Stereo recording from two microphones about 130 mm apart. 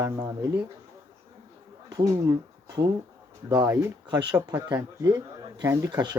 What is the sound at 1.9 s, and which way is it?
Speech, 30° right (ahead or behind).